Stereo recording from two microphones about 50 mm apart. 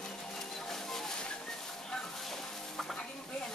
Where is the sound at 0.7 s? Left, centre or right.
Centre.